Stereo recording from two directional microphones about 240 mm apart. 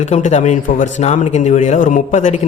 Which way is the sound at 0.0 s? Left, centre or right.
Left.